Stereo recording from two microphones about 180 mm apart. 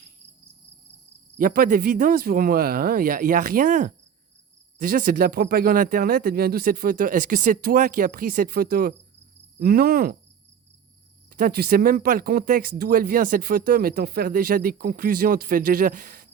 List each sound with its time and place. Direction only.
1.4 s speech: 50° right (ahead or behind)
11.3 s speech: 55° right (ahead or behind)